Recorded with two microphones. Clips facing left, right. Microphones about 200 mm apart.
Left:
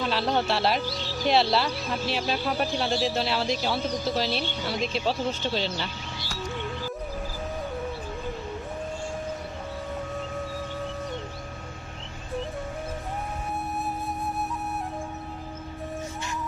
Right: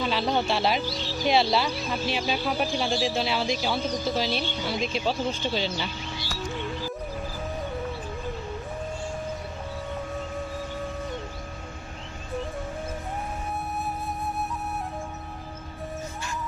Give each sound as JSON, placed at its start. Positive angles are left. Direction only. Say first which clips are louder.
{"t": 0.0, "sound": "speech", "louder": "even", "side_deg": 0}